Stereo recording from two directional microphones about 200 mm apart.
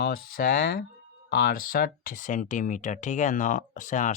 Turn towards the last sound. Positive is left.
turn(degrees=40)  # may be behind; listen again after turning